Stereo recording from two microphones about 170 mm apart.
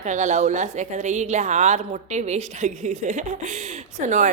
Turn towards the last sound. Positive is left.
turn(degrees=-45)  # may be behind; listen again after turning